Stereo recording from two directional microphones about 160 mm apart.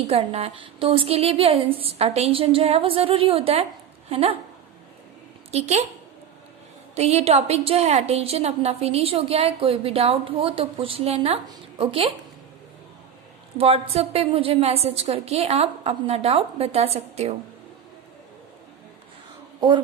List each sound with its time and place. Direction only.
0.1 s a woman's voice: 40° right (ahead or behind)
5.5 s a woman's voice: 45° right (ahead or behind)
6.9 s a woman's voice: 40° right (ahead or behind)
13.6 s a woman's voice: 40° right (ahead or behind)
19.5 s speech: 30° right (ahead or behind)